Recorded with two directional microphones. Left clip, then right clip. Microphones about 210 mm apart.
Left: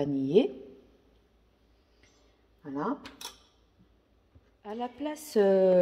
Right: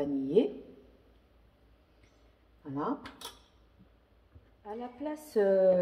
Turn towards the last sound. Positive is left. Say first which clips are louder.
# left 2 dB
turn(degrees=50)  # may be behind; listen again after turning